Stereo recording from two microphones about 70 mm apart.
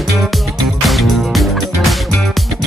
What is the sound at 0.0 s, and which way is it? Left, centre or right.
Music, centre.